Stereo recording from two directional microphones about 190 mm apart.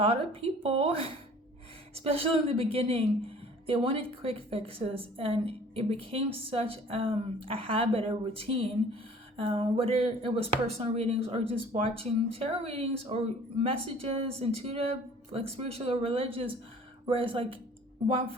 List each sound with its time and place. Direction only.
0.0 s a woman's voice: 30° right (ahead or behind)